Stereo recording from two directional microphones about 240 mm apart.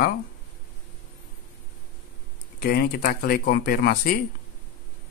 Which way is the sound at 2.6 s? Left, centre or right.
Left.